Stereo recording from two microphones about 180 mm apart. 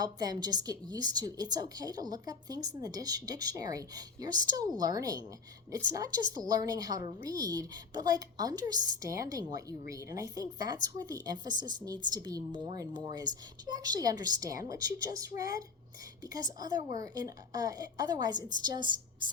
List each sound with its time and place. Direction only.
0.0 s a woman's voice: 20° right (ahead or behind)
19.2 s music: 25° right (ahead or behind)